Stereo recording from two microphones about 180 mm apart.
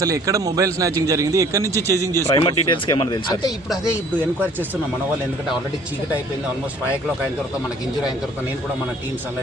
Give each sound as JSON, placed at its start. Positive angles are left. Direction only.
{"t": 0.0, "sound": "a man's voice", "side_deg": -20}
{"t": 2.4, "sound": "speech", "side_deg": 25}